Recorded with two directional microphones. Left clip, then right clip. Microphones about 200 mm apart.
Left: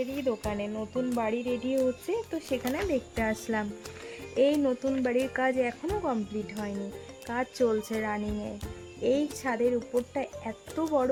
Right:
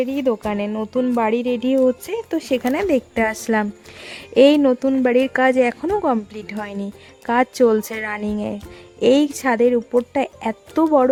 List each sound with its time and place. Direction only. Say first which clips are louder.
0.0 s speech: right 10 dB; 60° right (ahead or behind)